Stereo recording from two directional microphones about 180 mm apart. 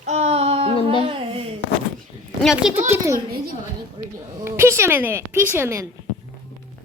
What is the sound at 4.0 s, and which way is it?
Speech, 25° right (ahead or behind).